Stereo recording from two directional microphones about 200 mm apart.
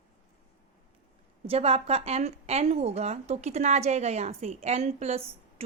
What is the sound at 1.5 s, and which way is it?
A woman's voice, 30° right (ahead or behind).